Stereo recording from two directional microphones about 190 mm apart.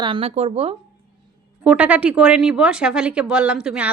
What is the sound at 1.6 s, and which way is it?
Speech, 5° right (ahead or behind).